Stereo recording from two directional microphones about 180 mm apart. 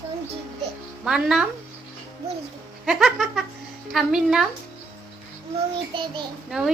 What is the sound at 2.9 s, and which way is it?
A woman's voice, centre (ahead or behind).